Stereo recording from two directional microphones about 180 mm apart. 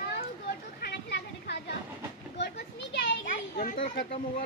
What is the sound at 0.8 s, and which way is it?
A child's voice, 65° left (ahead or behind).